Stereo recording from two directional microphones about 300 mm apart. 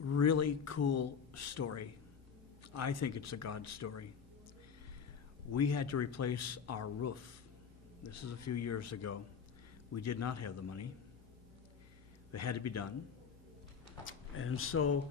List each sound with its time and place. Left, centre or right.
0.0 s a man's voice: left
5.5 s speech: left
12.3 s speech: left
14.0 s speech: left